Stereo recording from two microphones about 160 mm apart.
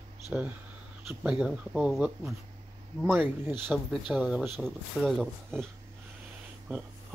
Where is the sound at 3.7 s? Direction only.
Centre (ahead or behind).